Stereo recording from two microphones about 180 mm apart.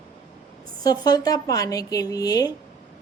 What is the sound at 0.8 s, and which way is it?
A woman's voice, 20° left (ahead or behind).